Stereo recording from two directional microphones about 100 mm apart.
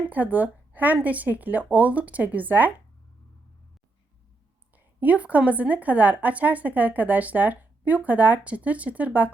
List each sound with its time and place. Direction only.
0.1 s speech: 15° right (ahead or behind)
4.9 s speech: 15° right (ahead or behind)